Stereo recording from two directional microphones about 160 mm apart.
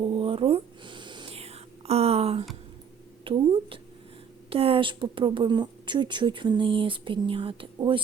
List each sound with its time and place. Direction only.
0.0 s whispering: 35° right (ahead or behind)
3.2 s a sound: 35° right (ahead or behind)
4.4 s speech: 35° right (ahead or behind)